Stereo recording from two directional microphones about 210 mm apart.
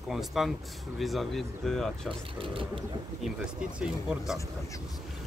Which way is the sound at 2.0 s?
25° right (ahead or behind).